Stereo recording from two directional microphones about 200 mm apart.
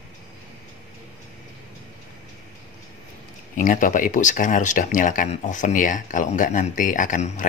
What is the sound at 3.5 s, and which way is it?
Speech, 40° left (ahead or behind).